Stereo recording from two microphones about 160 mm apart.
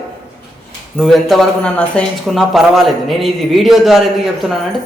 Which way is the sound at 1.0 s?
Centre (ahead or behind).